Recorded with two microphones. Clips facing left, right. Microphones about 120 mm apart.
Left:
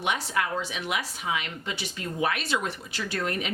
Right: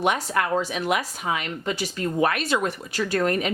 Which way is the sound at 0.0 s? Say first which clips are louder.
Right 5 dB; 45° right (ahead or behind).